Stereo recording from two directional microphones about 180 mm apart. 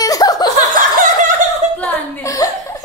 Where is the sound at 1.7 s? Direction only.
10° left (ahead or behind).